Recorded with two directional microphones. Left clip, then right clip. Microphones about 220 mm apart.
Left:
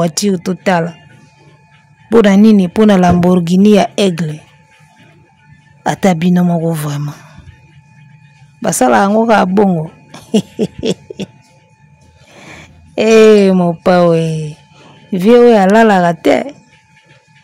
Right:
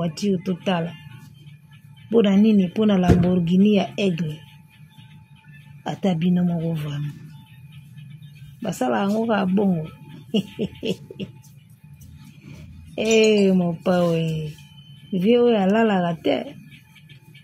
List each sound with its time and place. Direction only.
0.0 s speech: 50° left (ahead or behind)
2.0 s speech: 45° left (ahead or behind)
5.9 s speech: 45° left (ahead or behind)
8.5 s speech: 45° left (ahead or behind)
12.4 s speech: 40° left (ahead or behind)